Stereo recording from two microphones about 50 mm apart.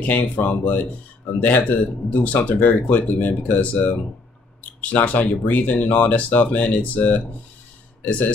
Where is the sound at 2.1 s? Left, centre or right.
Left.